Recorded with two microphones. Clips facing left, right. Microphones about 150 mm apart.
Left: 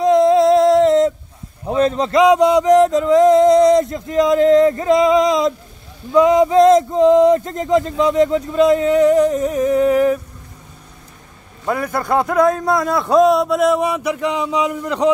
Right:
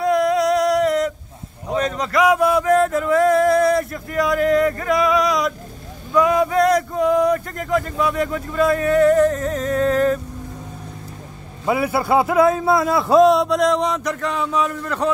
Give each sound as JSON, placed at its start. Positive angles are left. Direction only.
{"t": 0.0, "sound": "music", "side_deg": 25}
{"t": 1.7, "sound": "a sound", "side_deg": 30}
{"t": 11.6, "sound": "a man's voice", "side_deg": -5}